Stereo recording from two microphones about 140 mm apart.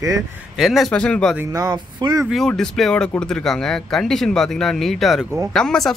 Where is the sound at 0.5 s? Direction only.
Centre (ahead or behind).